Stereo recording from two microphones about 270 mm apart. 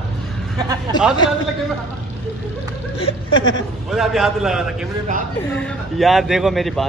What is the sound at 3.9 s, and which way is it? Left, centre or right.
Speech, centre.